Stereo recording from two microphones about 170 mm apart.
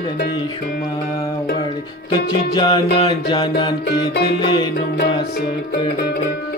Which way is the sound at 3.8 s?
70° left (ahead or behind).